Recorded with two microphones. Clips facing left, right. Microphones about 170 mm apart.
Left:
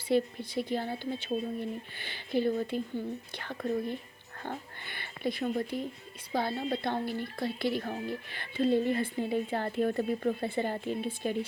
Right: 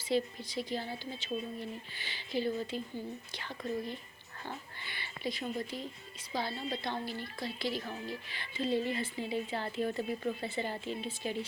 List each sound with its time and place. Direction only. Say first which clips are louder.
0.1 s speech: left 4 dB; 55° left (ahead or behind)